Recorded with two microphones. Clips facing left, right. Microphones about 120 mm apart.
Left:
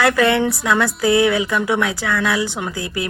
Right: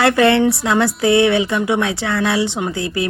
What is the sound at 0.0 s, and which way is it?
A woman's voice, 25° right (ahead or behind).